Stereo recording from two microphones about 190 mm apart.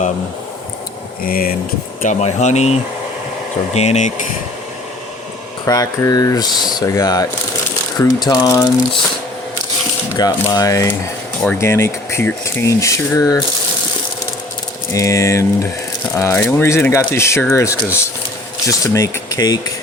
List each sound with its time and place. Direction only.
1.2 s speech: 50° left (ahead or behind)
2.0 s speech: 40° left (ahead or behind)
3.8 s speech: 35° left (ahead or behind)
5.6 s speech: 20° left (ahead or behind)
10.2 s speech: 20° left (ahead or behind)
14.9 s speech: 15° left (ahead or behind)